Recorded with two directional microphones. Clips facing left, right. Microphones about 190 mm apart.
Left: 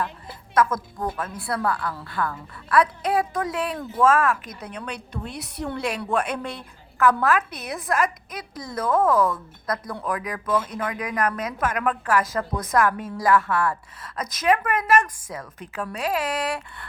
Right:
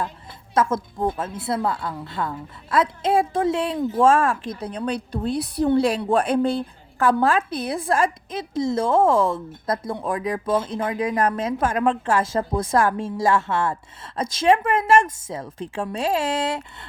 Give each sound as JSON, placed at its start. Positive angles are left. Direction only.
{"t": 0.5, "sound": "a woman's voice", "side_deg": -25}